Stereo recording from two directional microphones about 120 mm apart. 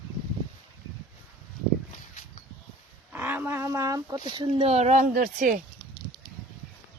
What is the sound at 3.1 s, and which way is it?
Speech, 15° right (ahead or behind).